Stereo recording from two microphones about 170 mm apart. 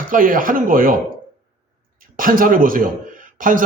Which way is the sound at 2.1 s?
55° right (ahead or behind).